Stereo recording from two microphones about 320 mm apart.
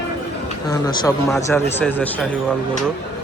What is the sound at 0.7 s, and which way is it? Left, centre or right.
Speech, centre.